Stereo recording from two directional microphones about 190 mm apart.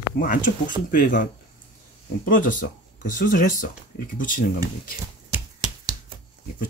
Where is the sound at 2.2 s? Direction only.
45° left (ahead or behind).